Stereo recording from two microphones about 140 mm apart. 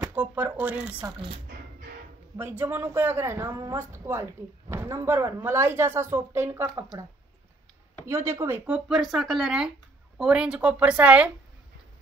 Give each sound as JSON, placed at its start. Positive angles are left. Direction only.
{"t": 0.1, "sound": "speech", "side_deg": -10}
{"t": 0.9, "sound": "speech", "side_deg": -35}
{"t": 2.3, "sound": "speech", "side_deg": -15}